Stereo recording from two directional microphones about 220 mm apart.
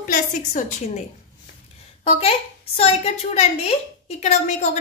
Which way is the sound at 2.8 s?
30° left (ahead or behind).